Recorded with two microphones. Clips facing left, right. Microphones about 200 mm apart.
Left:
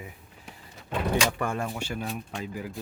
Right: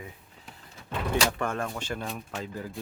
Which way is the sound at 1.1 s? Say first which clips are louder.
Right 2 dB; 10° left (ahead or behind).